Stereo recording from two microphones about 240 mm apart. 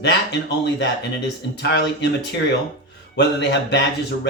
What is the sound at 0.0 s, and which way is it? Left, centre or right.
Speech, left.